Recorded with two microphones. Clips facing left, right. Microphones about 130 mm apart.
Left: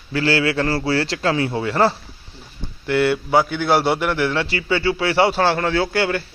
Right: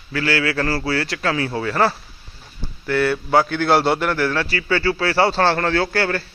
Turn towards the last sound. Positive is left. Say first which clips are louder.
# even
turn(degrees=15)  # may be behind; listen again after turning